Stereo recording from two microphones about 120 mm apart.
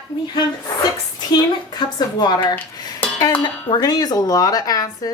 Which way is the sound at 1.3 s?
35° left (ahead or behind).